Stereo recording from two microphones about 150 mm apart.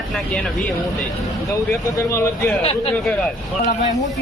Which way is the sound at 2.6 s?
45° left (ahead or behind).